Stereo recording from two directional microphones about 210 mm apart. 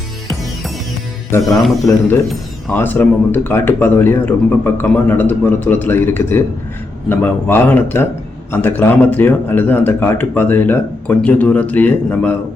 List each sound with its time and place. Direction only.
1.3 s speech: 15° left (ahead or behind)
2.7 s speech: 10° left (ahead or behind)